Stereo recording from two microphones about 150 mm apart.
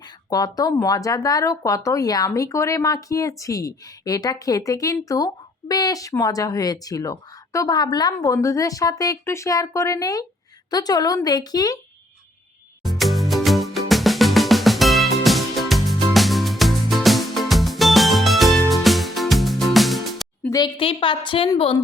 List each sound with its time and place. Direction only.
0.3 s speech: 25° left (ahead or behind)
12.8 s music: centre (ahead or behind)
20.7 s a woman's voice: 35° left (ahead or behind)